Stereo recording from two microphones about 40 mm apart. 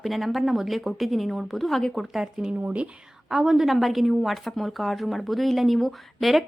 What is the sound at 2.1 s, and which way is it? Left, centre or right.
Speech, centre.